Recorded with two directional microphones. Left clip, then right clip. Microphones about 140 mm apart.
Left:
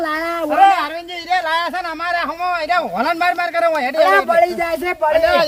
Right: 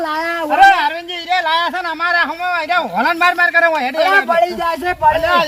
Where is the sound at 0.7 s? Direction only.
60° left (ahead or behind).